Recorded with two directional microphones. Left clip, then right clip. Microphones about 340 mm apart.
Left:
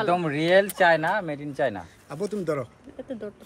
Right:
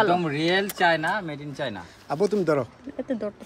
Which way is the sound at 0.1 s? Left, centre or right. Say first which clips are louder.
Left 2 dB; left.